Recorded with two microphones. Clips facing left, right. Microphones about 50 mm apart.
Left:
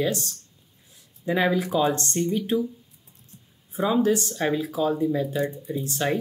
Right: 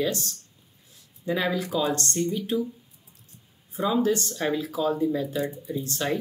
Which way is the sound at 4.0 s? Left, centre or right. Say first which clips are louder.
Left 2 dB; centre.